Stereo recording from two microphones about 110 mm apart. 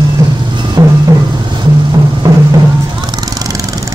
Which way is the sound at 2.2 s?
30° right (ahead or behind).